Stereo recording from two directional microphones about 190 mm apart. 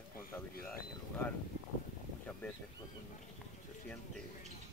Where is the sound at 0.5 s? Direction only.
50° left (ahead or behind).